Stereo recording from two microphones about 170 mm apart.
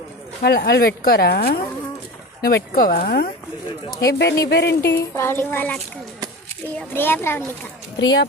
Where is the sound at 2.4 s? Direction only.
60° left (ahead or behind); by 4.9 s 80° left.